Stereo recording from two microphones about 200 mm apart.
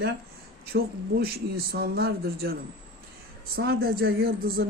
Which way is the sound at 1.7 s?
50° right (ahead or behind).